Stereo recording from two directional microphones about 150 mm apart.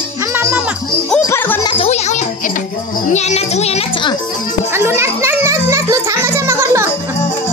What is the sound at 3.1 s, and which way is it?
Children playing, 50° left (ahead or behind).